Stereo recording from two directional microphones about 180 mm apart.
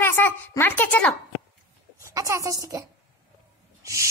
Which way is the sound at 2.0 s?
15° right (ahead or behind).